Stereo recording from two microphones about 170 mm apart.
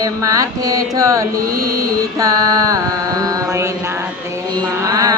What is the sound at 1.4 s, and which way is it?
Mantra, 60° right (ahead or behind).